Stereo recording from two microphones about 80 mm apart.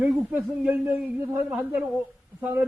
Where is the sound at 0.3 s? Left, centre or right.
Centre.